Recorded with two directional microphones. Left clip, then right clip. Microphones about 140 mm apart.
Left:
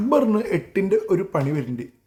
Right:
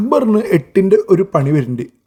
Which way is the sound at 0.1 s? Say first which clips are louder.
Right 6 dB; 40° right (ahead or behind).